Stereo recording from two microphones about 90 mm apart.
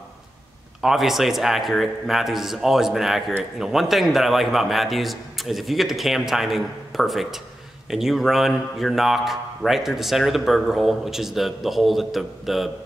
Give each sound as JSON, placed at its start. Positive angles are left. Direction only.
{"t": 0.7, "sound": "speech", "side_deg": -5}